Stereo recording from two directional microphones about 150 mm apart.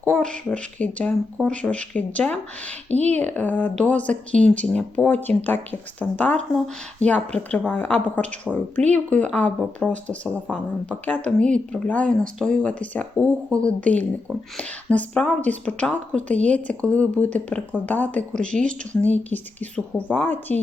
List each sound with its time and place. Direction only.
0.0 s a woman's voice: 5° left (ahead or behind)
2.9 s speech: 45° right (ahead or behind)
3.2 s a woman's voice: 10° left (ahead or behind)